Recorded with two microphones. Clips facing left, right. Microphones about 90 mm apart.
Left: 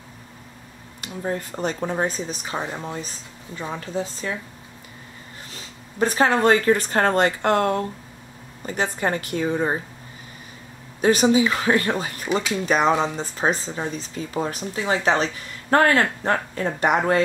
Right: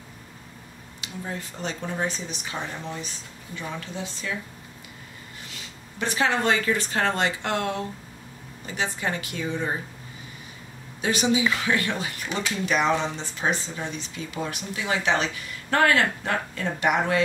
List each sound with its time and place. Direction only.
1.0 s speech: 45° left (ahead or behind)
5.5 s a woman's voice: 40° left (ahead or behind)
11.0 s speech: 40° left (ahead or behind)